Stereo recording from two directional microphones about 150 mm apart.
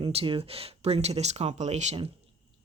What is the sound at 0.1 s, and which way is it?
Speech, 40° right (ahead or behind).